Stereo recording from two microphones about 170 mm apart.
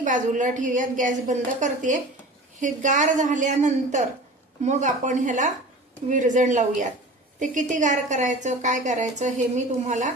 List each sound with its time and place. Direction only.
0.0 s a woman's voice: 50° right (ahead or behind)